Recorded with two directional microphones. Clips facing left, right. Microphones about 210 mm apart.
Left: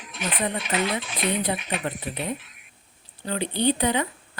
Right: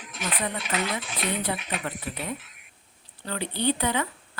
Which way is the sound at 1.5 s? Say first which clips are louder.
Left 3 dB; 20° left (ahead or behind).